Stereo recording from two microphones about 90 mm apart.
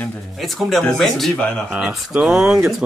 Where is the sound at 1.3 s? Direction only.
15° left (ahead or behind).